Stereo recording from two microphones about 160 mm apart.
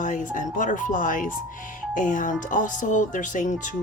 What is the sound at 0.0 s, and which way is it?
Speech, 50° left (ahead or behind).